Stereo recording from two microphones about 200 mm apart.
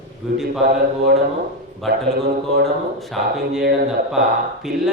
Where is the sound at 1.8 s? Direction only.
Centre (ahead or behind).